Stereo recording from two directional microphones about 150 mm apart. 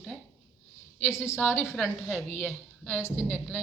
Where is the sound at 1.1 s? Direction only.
15° left (ahead or behind).